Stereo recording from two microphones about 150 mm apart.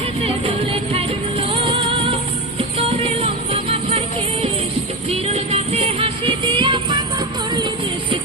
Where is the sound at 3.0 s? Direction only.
40° right (ahead or behind).